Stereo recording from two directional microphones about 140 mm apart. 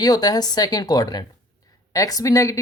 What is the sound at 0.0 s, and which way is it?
Speech, 30° left (ahead or behind).